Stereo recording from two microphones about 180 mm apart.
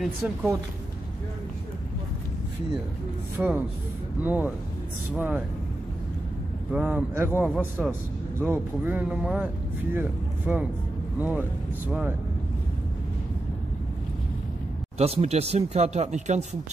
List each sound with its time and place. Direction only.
0.0 s speech: centre (ahead or behind)
3.4 s speech: 10° right (ahead or behind)
6.7 s speech: 5° right (ahead or behind)
15.0 s speech: 35° right (ahead or behind)